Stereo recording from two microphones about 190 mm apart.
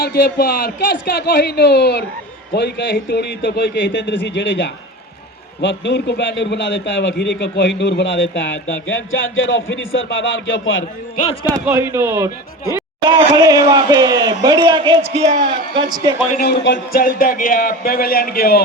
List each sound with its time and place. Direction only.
0.0 s a man's voice: 55° left (ahead or behind); by 8.4 s 75° left (ahead or behind)
8.9 s speech: 90° left
11.6 s a man's voice: 10° right (ahead or behind)
15.0 s a man's voice: 35° right (ahead or behind)
15.7 s a man's voice: 20° right (ahead or behind)
16.3 s speech: 55° left (ahead or behind)
17.0 s a man's voice: 45° left (ahead or behind)